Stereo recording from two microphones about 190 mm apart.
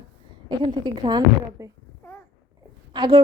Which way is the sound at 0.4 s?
25° right (ahead or behind).